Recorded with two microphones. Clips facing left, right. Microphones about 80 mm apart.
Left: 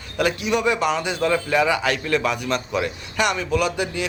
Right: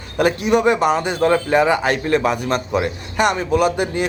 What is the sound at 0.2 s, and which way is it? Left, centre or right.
A man's voice, right.